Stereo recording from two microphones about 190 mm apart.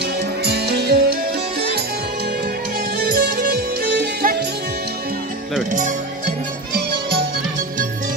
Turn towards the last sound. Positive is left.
turn(degrees=-45)  # may be behind; listen again after turning